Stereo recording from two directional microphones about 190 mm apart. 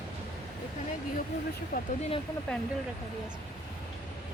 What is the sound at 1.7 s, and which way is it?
Speech, 50° left (ahead or behind).